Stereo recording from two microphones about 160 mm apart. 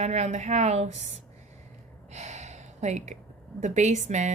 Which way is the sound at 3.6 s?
45° right (ahead or behind).